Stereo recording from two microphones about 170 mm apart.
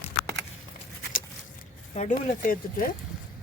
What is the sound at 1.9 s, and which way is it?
Speech, 45° left (ahead or behind).